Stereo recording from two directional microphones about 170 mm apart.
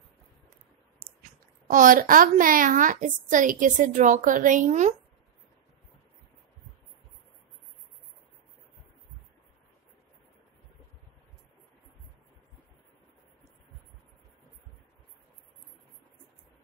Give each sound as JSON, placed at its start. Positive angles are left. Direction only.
{"t": 1.7, "sound": "a woman's voice", "side_deg": -50}